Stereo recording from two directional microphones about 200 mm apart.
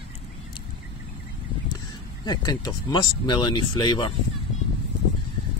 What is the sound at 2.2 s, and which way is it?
Speech, 20° left (ahead or behind).